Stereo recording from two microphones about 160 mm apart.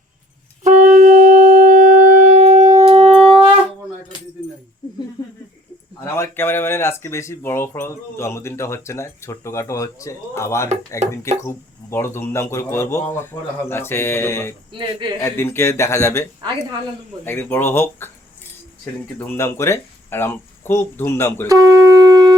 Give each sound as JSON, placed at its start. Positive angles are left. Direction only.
{"t": 0.6, "sound": "shofar", "side_deg": -50}
{"t": 4.8, "sound": "a sound", "side_deg": 25}
{"t": 6.1, "sound": "speech", "side_deg": 15}
{"t": 14.7, "sound": "speech", "side_deg": -30}
{"t": 15.2, "sound": "speech", "side_deg": 15}
{"t": 17.2, "sound": "speech", "side_deg": 15}
{"t": 19.2, "sound": "speech", "side_deg": 15}
{"t": 21.4, "sound": "shofar", "side_deg": -20}